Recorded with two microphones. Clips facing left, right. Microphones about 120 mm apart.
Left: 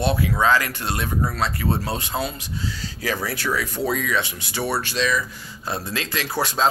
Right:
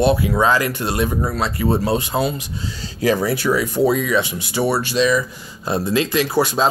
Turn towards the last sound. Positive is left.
turn(degrees=-10)  # may be behind; listen again after turning